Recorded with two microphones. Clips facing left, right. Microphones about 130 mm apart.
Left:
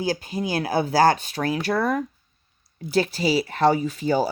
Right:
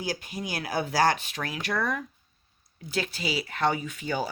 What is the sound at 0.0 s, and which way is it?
Speech, 30° left (ahead or behind).